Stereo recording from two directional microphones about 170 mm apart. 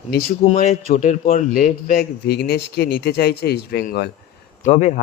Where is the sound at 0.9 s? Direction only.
45° left (ahead or behind); by 4.1 s 65° left (ahead or behind).